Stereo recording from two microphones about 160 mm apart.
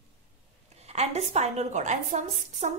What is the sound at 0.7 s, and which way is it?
A woman's voice, 40° right (ahead or behind).